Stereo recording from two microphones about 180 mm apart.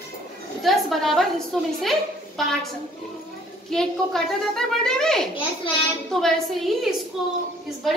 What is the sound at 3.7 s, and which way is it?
A woman's voice, 5° left (ahead or behind).